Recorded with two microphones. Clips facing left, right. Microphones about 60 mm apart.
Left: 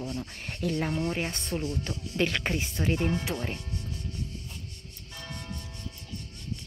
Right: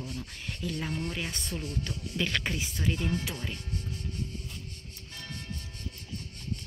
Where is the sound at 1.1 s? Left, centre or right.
Left.